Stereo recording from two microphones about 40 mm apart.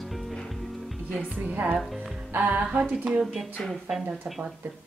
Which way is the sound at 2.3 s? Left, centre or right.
Right.